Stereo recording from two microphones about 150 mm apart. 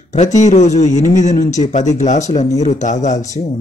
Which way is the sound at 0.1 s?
50° left (ahead or behind).